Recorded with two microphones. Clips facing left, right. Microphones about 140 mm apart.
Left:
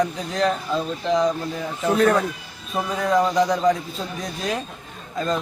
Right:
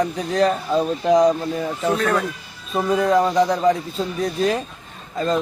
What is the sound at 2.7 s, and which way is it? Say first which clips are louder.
Speech: right 4 dB; 5° right (ahead or behind).